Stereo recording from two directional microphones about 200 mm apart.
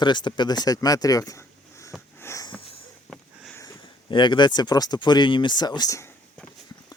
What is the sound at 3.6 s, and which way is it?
Speech, 20° left (ahead or behind).